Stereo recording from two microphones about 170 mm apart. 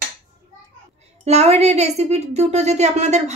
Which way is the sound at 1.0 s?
40° right (ahead or behind).